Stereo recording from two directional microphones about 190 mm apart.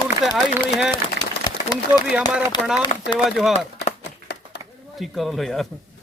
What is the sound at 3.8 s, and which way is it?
Chopping, 60° left (ahead or behind).